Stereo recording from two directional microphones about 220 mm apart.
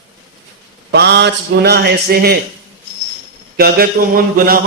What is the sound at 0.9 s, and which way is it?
Speech, 50° right (ahead or behind).